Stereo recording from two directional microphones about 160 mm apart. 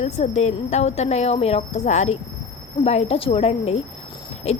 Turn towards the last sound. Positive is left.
turn(degrees=40)  # may be behind; listen again after turning